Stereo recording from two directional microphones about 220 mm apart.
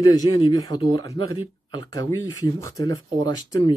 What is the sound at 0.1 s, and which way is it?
Speech, 15° left (ahead or behind).